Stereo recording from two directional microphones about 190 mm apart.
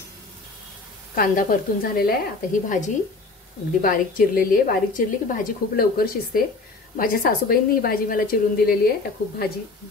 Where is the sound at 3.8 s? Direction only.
50° left (ahead or behind).